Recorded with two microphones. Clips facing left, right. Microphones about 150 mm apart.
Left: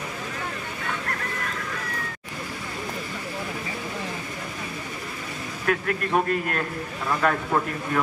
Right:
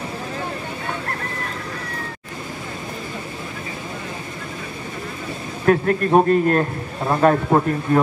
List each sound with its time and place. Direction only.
5.7 s a man's voice: 35° right (ahead or behind)